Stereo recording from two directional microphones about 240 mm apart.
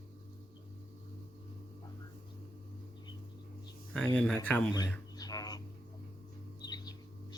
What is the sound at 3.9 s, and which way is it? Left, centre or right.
Speech, centre.